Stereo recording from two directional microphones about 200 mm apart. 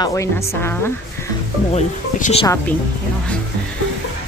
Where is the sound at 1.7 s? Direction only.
35° left (ahead or behind).